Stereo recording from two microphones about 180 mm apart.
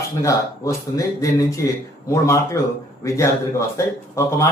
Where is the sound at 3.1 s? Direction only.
15° left (ahead or behind).